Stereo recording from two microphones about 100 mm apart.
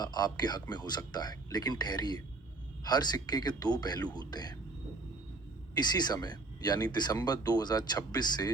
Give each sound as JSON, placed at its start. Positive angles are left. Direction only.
{"t": 0.0, "sound": "speech", "side_deg": 45}
{"t": 5.7, "sound": "speech", "side_deg": 45}